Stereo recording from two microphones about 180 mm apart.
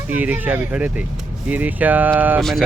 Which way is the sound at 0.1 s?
10° right (ahead or behind).